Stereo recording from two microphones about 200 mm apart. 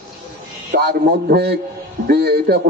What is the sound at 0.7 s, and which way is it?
A man's voice, 55° right (ahead or behind).